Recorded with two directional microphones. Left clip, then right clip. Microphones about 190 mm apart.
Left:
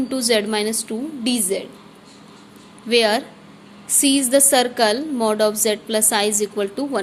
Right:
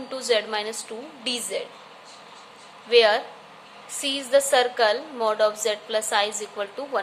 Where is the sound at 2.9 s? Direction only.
40° left (ahead or behind).